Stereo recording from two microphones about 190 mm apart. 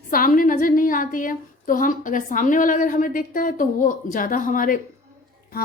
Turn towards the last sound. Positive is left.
turn(degrees=45)  # may be behind; listen again after turning